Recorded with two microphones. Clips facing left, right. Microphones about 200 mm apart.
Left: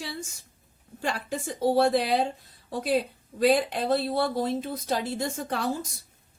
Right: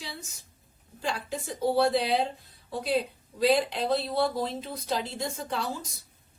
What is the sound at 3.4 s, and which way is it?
A woman's voice, 50° left (ahead or behind).